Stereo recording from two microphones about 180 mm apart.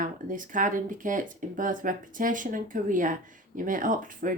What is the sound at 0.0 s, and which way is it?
Speech, 45° right (ahead or behind).